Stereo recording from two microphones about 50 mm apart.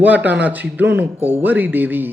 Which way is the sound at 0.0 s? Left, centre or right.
Right.